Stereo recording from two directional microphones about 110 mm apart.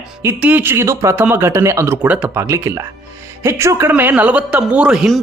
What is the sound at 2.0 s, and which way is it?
Speech, 10° right (ahead or behind).